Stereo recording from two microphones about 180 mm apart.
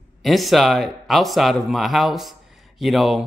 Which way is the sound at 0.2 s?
Centre (ahead or behind).